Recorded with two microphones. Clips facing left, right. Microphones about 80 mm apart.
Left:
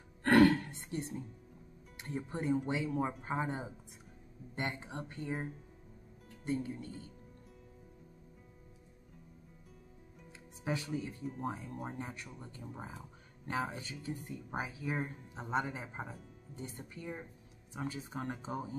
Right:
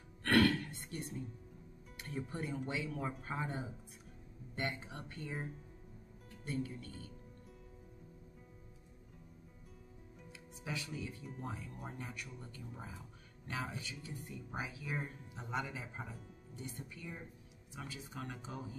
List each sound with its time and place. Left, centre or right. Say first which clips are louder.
0.2 s music: left 5 dB; left
2.0 s speech: left 3 dB; left
6.4 s speech: left 4 dB; left
10.6 s speech: left 6 dB; left